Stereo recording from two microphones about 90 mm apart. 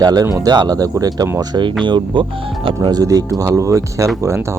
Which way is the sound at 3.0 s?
40° right (ahead or behind).